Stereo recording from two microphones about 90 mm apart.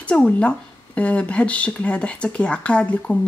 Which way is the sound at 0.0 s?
15° left (ahead or behind).